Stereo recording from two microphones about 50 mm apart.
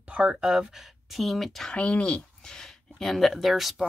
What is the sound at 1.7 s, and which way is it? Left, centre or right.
Speech, left.